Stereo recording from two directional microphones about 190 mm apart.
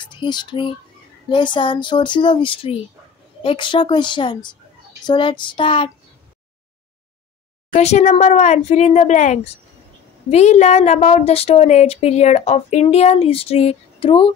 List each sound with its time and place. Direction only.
0.0 s speech: 25° left (ahead or behind)
7.7 s speech: 35° left (ahead or behind)